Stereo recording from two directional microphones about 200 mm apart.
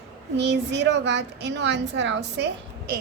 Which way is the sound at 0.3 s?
60° right (ahead or behind).